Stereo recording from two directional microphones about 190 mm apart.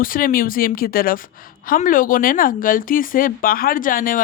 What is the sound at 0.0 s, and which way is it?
A woman's voice, 45° left (ahead or behind).